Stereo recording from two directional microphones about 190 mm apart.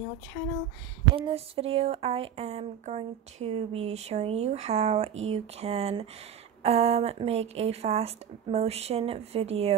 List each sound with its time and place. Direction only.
1.1 s speech: 30° right (ahead or behind)